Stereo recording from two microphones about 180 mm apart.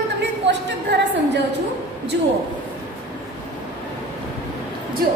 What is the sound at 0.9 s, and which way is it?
Speech, 80° right.